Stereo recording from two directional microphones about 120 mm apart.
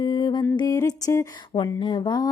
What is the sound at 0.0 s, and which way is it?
Music, 40° left (ahead or behind).